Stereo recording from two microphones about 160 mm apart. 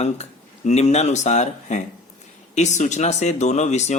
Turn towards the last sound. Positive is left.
turn(degrees=45)  # may be behind; listen again after turning